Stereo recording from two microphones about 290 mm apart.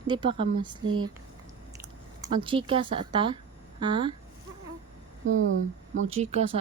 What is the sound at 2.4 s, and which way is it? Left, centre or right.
Speech, centre.